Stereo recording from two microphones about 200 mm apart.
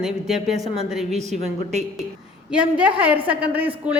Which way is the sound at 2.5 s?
5° right (ahead or behind).